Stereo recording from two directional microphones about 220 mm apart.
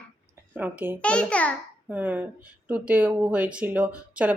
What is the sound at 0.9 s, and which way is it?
Speech, 5° left (ahead or behind).